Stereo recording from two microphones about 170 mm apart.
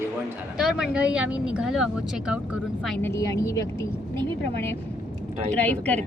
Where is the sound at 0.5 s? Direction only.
5° right (ahead or behind).